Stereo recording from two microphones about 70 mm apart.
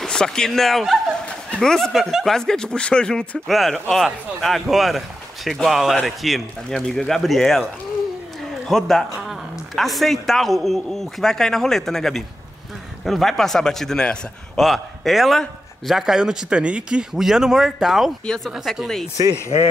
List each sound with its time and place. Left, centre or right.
0.0 s speech: centre
1.9 s speech: centre
3.4 s a man's voice: centre
8.6 s a man's voice: centre
14.6 s a man's voice: centre
18.2 s speech: centre